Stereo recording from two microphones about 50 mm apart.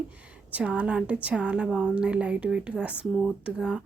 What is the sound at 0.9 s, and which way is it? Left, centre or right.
Speech, right.